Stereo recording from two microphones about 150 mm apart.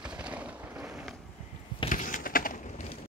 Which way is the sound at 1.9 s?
60° left (ahead or behind).